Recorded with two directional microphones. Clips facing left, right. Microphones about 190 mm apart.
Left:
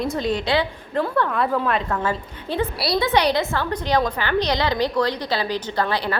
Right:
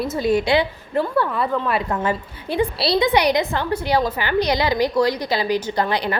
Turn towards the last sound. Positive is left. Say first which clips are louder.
# right 2 dB
turn(degrees=-15)  # may be behind; listen again after turning